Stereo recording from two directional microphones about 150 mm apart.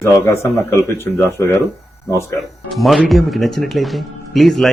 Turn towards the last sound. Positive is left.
turn(degrees=0)  # may be behind; listen again after turning